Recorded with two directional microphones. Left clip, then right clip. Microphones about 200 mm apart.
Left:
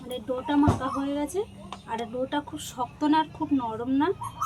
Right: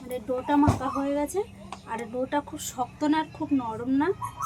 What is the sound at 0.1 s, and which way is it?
A woman's voice, 5° right (ahead or behind).